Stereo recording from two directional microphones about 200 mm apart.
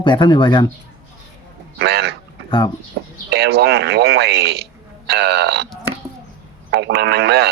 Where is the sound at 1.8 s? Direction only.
55° right (ahead or behind).